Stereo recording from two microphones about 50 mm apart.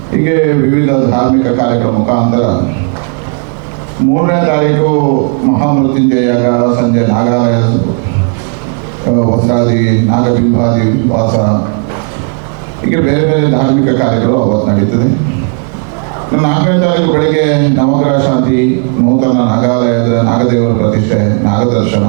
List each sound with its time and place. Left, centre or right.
0.2 s a man's voice: right
4.1 s a man's voice: right
9.1 s a man's voice: right
12.9 s a man's voice: right
16.3 s a man's voice: right